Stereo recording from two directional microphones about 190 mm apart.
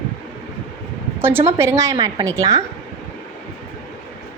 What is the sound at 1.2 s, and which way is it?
A woman's voice, 10° right (ahead or behind).